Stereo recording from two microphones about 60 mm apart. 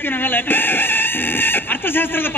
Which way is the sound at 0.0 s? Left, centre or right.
Left.